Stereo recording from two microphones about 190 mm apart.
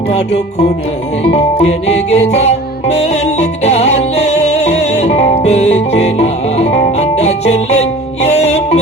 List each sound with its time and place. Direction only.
1.2 s music: 35° left (ahead or behind)